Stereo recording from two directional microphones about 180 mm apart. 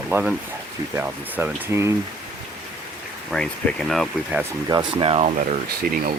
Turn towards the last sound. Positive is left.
turn(degrees=-50)  # may be behind; listen again after turning